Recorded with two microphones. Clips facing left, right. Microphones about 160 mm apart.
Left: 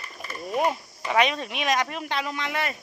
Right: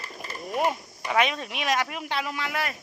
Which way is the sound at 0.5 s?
Centre (ahead or behind).